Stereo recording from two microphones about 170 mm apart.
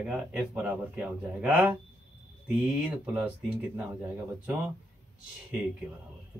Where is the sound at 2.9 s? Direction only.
10° right (ahead or behind).